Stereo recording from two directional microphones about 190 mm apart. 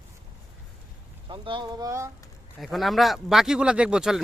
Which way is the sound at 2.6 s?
Centre (ahead or behind).